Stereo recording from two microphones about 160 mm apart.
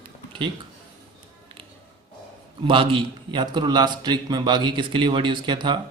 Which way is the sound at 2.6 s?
35° right (ahead or behind).